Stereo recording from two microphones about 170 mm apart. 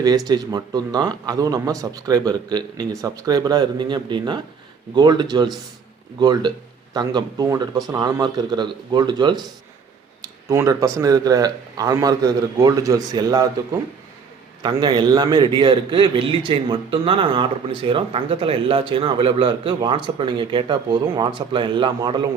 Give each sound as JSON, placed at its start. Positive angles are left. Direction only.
{"t": 0.3, "sound": "a man's voice", "side_deg": -25}
{"t": 14.6, "sound": "a man's voice", "side_deg": -25}